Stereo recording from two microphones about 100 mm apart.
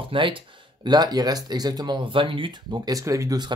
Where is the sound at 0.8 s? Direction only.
45° right (ahead or behind).